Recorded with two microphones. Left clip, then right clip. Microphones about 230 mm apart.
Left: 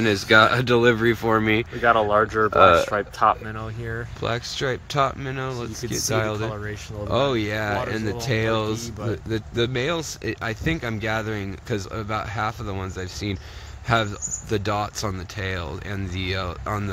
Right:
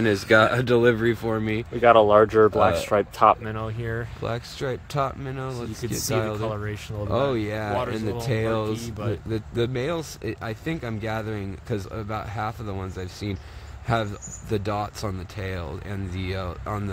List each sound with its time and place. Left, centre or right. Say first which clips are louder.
0.0 s speech: left 2 dB; centre
1.8 s speech: right 4 dB; right
4.2 s speech: left 8 dB; centre
6.4 s speech: even; right
7.1 s speech: left 2 dB; centre